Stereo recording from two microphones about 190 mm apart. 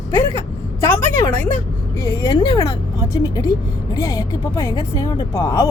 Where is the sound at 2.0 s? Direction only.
20° left (ahead or behind).